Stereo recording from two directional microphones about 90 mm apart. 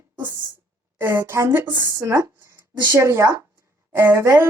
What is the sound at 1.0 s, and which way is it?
A woman's voice, 30° right (ahead or behind).